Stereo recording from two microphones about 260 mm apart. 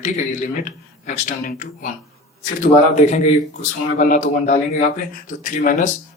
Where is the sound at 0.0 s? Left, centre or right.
Left.